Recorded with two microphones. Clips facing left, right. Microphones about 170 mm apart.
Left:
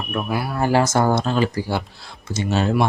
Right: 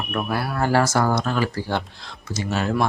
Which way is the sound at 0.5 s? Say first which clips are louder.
Left 2 dB; 15° left (ahead or behind).